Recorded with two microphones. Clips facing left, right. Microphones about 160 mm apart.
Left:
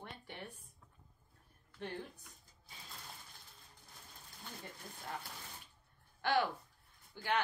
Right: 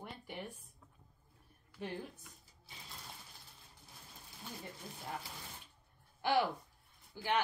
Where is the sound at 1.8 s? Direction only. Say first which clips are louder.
Right 1 dB; centre (ahead or behind).